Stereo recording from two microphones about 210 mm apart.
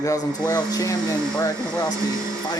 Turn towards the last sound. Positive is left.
turn(degrees=15)  # may be behind; listen again after turning